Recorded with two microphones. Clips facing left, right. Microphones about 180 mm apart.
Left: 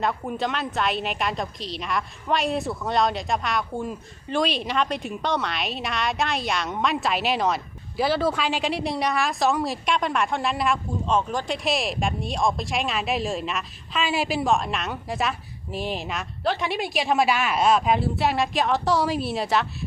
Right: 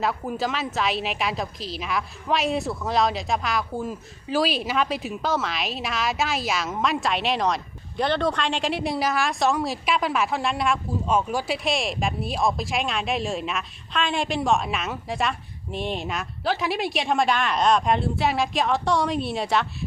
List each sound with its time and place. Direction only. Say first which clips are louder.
0.0 s a woman's voice: even; centre (ahead or behind)